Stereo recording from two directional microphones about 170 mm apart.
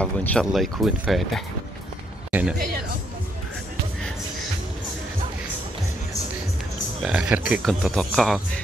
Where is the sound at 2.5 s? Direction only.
60° right (ahead or behind).